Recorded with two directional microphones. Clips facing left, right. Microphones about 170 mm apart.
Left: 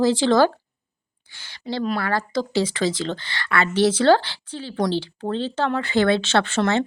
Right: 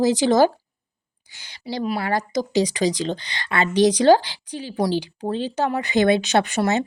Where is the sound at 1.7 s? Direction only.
15° right (ahead or behind).